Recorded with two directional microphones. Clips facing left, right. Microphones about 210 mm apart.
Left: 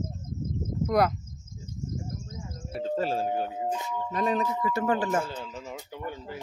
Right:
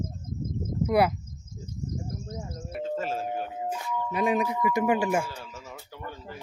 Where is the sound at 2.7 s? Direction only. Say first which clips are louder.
Left 2 dB; 35° left (ahead or behind).